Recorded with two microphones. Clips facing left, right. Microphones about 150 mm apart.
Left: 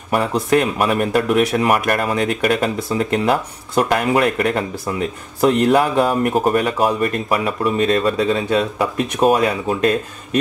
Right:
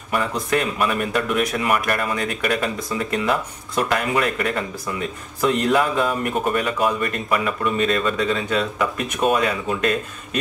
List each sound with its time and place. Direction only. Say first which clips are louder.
0.1 s speech: left 5 dB; 35° left (ahead or behind)